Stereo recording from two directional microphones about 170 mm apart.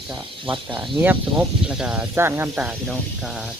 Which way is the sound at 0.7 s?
5° right (ahead or behind).